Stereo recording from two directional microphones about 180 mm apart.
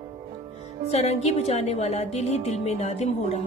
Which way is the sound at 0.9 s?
35° left (ahead or behind).